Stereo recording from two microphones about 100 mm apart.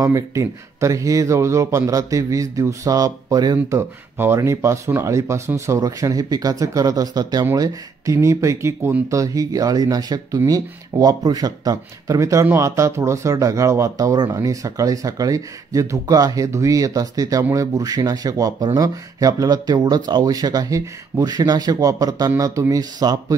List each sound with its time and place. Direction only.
0.0 s speech: 30° right (ahead or behind)
3.6 s speech: 25° right (ahead or behind)